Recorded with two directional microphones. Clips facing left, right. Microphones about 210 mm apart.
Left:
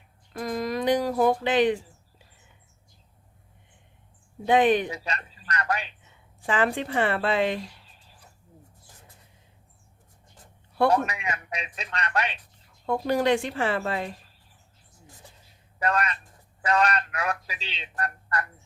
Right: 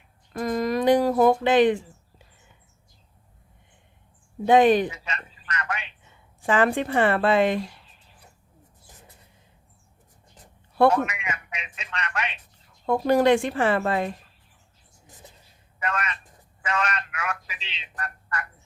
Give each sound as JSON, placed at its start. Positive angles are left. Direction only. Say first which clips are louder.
{"t": 0.3, "sound": "speech", "louder": "right 4 dB", "side_deg": -45}
{"t": 4.4, "sound": "speech", "louder": "right 3 dB", "side_deg": -40}
{"t": 4.9, "sound": "speech", "louder": "left 2 dB", "side_deg": 35}
{"t": 6.4, "sound": "a woman's voice", "louder": "right 4 dB", "side_deg": -45}
{"t": 10.8, "sound": "speech", "louder": "right 2 dB", "side_deg": 35}
{"t": 12.9, "sound": "a woman's voice", "louder": "right 4 dB", "side_deg": -50}
{"t": 15.8, "sound": "speech", "louder": "left 4 dB", "side_deg": 35}